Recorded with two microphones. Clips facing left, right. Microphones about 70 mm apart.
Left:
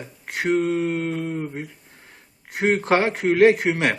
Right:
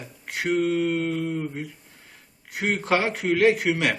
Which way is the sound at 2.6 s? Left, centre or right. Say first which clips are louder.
Left 4 dB; left.